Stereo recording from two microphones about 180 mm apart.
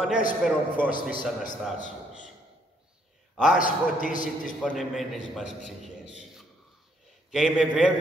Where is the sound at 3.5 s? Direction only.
45° left (ahead or behind).